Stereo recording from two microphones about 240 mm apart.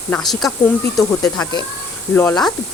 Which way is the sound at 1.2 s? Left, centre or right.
Centre.